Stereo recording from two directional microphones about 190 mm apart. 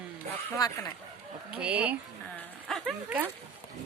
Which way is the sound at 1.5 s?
5° right (ahead or behind).